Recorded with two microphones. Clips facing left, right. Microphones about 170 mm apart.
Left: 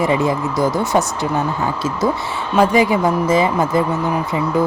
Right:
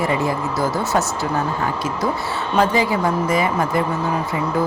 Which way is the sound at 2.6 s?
15° left (ahead or behind).